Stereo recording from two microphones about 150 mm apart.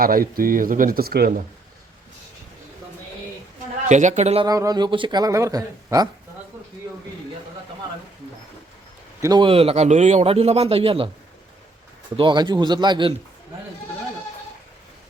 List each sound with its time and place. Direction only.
0.0 s speech: 75° right (ahead or behind); by 1.4 s 90° right
3.8 s speech: 50° right (ahead or behind)
4.4 s speech: 25° right (ahead or behind)
9.2 s speech: 25° right (ahead or behind)
9.5 s speech: 40° right (ahead or behind)
12.1 s speech: 30° right (ahead or behind)